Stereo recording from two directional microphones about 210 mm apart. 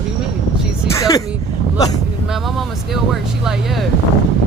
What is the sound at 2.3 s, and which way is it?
Speech, centre (ahead or behind).